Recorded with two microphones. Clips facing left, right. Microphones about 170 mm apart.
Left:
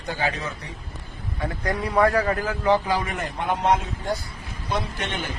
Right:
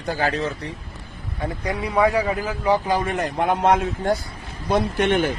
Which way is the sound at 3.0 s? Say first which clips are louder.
Right 6 dB; 45° right (ahead or behind).